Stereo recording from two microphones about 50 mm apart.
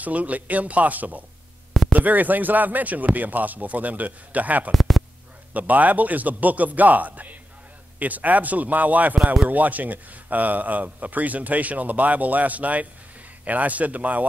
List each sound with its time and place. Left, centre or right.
0.0 s speech: right
4.7 s a sound: centre
5.5 s speech: right